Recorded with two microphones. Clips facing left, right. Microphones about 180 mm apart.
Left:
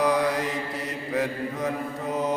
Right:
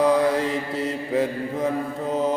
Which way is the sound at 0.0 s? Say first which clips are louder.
Right 4 dB; 30° right (ahead or behind).